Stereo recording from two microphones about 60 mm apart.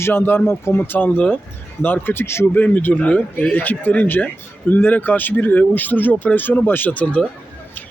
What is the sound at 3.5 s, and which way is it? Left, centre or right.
Speech, left.